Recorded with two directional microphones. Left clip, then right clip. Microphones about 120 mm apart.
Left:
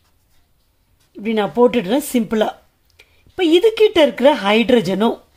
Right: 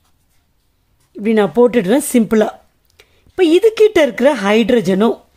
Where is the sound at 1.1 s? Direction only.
35° right (ahead or behind).